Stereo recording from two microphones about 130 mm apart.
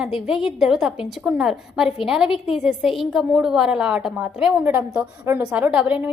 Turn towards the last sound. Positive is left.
turn(degrees=-10)  # may be behind; listen again after turning